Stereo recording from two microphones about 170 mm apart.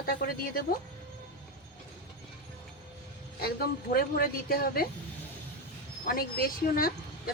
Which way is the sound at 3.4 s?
65° left (ahead or behind).